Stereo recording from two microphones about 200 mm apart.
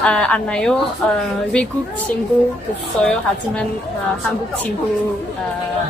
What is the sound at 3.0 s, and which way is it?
Speech, 5° left (ahead or behind).